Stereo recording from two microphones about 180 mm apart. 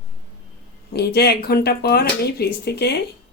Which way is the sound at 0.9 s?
65° left (ahead or behind).